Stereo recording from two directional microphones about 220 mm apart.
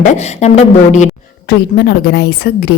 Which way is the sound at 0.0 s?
30° left (ahead or behind).